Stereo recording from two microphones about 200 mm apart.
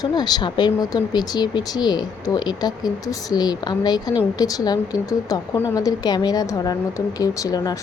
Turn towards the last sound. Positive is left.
turn(degrees=20)  # may be behind; listen again after turning